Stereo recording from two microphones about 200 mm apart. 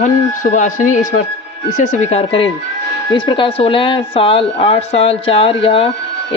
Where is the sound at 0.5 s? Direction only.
40° left (ahead or behind).